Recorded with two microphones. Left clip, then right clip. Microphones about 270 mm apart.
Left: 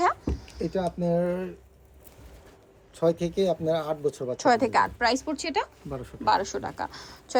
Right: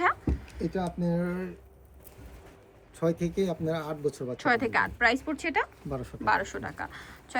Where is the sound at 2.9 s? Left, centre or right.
Centre.